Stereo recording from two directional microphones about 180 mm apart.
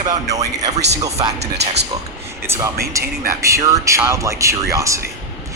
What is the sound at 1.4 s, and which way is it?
Speech, 70° right (ahead or behind).